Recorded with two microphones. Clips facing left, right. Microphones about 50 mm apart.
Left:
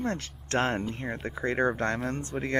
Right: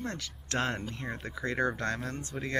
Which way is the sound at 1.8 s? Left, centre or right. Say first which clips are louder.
Left 5 dB; left.